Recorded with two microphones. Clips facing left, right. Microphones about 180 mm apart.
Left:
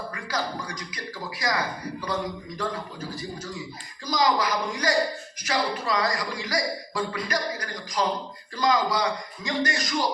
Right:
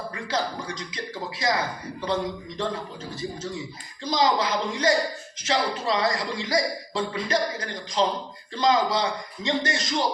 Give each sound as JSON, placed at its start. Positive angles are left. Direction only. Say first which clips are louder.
{"t": 0.1, "sound": "a man's voice", "louder": "right 4 dB", "side_deg": -25}